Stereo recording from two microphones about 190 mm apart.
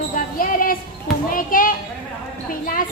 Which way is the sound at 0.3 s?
45° left (ahead or behind).